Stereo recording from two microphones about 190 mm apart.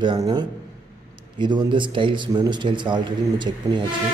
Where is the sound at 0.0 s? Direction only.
25° right (ahead or behind).